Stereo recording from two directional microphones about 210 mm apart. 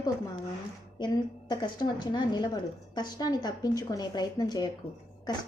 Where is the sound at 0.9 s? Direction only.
20° left (ahead or behind).